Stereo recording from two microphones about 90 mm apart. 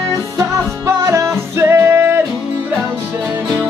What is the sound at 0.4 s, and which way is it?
Music, 35° right (ahead or behind).